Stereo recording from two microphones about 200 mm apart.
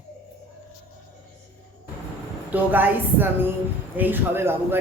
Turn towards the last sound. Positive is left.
turn(degrees=-10)  # may be behind; listen again after turning